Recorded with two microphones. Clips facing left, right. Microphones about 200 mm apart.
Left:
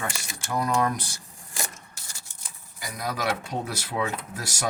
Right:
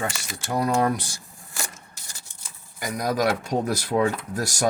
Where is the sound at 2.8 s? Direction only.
45° right (ahead or behind).